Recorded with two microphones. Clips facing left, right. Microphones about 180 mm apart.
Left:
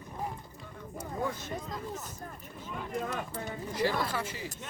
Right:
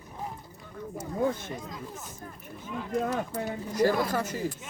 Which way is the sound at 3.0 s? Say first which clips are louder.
Right 6 dB; 45° right (ahead or behind).